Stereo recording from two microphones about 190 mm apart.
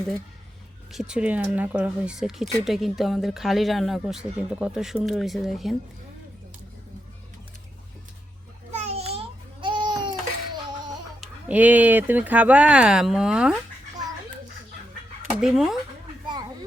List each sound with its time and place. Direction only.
0.9 s speech: 5° right (ahead or behind)
8.7 s a sound: 35° right (ahead or behind)
11.2 s speech: 5° right (ahead or behind)
15.4 s speech: centre (ahead or behind)